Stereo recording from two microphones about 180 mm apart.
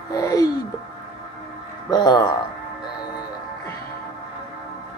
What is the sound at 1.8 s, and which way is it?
Speech, 20° left (ahead or behind).